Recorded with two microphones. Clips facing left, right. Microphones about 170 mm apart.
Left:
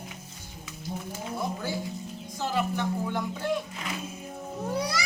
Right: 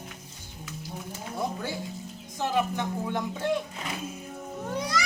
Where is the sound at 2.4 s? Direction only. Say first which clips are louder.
Right 1 dB; 20° right (ahead or behind).